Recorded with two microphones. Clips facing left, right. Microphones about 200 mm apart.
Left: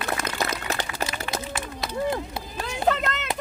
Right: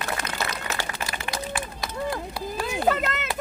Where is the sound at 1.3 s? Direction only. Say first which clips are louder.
Even; 20° left (ahead or behind).